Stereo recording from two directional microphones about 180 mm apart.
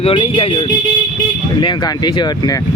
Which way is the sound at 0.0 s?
30° left (ahead or behind).